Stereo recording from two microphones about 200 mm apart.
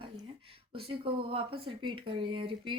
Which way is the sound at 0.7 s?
25° right (ahead or behind).